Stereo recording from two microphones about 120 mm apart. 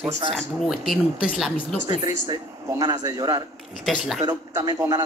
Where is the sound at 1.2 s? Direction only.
5° right (ahead or behind).